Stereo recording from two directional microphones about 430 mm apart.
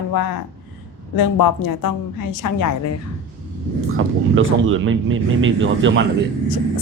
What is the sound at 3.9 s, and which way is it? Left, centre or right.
Speech, right.